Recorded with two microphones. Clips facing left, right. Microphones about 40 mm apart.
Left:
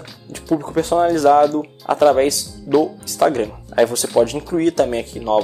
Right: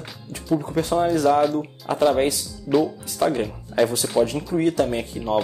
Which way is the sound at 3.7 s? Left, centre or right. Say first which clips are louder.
Left 4 dB; left.